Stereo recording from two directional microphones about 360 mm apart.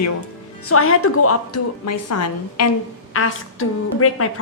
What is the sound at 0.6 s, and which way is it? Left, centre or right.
Speech, left.